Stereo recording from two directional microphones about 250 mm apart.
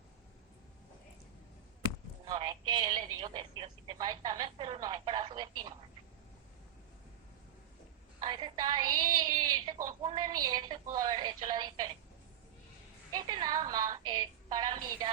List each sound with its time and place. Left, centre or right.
2.2 s speech: centre
8.2 s a woman's voice: centre
13.2 s speech: centre